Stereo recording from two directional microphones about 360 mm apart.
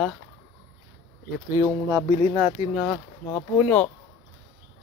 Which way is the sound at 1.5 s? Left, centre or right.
Centre.